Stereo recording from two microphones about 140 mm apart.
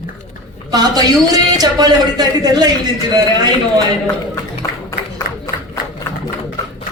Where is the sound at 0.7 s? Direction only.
30° right (ahead or behind).